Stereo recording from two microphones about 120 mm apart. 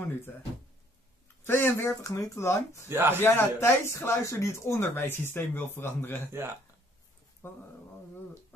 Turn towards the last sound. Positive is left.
turn(degrees=20)  # may be behind; listen again after turning